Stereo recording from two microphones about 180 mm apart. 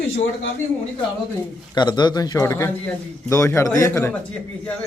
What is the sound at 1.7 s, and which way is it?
A man's voice, 25° left (ahead or behind).